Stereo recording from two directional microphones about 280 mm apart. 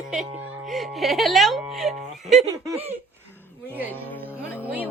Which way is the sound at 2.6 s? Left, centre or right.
Centre.